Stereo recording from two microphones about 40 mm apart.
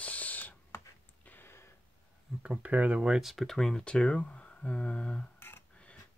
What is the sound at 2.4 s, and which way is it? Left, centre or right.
Speech, right.